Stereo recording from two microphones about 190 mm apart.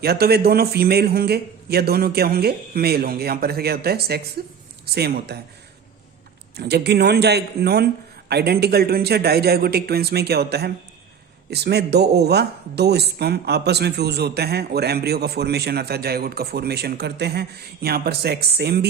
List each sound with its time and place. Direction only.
0.0 s speech: 55° right (ahead or behind)
6.6 s speech: 60° right (ahead or behind)